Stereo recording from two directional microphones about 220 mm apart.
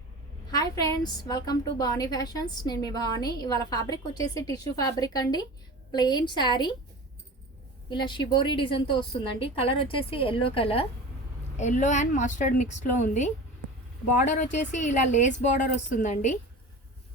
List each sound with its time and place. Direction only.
0.5 s a woman's voice: 15° left (ahead or behind)
7.9 s a woman's voice: 20° left (ahead or behind)